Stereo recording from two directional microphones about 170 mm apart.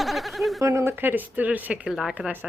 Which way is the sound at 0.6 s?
15° right (ahead or behind).